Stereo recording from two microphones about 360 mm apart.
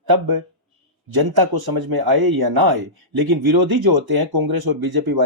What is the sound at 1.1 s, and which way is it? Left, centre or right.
Speech, right.